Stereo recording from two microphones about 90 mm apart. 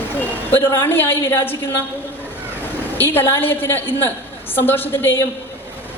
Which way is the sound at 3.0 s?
25° left (ahead or behind).